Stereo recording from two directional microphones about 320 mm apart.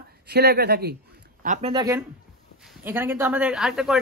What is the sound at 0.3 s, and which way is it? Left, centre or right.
Speech, right.